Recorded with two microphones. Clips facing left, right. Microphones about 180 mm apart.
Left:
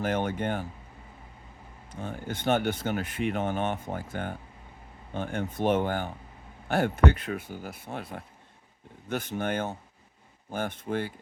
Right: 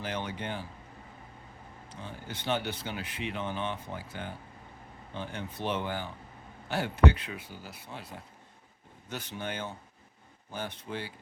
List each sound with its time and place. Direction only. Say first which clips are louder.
0.0 s speech: left 8 dB; 50° left (ahead or behind)
1.9 s speech: left 7 dB; 50° left (ahead or behind)